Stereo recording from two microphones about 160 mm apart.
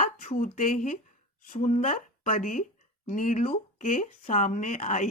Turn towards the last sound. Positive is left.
turn(degrees=50)  # may be behind; listen again after turning